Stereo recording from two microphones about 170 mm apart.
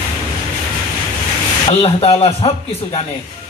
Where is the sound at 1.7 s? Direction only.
35° left (ahead or behind).